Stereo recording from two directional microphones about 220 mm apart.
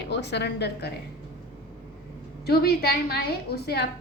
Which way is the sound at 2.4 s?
45° left (ahead or behind).